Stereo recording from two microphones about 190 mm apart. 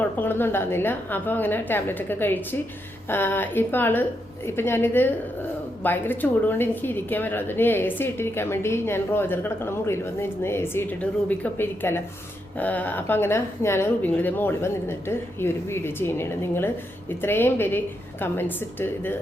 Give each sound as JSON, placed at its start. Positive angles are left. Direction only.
{"t": 0.0, "sound": "a woman's voice", "side_deg": 10}